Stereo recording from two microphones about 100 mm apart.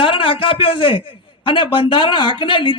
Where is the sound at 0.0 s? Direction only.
60° left (ahead or behind).